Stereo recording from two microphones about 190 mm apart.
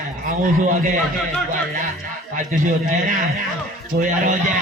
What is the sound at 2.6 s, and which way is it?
Speech, 45° right (ahead or behind).